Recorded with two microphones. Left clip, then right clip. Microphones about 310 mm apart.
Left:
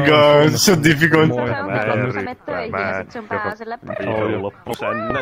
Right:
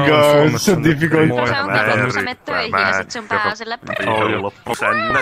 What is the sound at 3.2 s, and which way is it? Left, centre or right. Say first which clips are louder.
Speech: right 5 dB; right.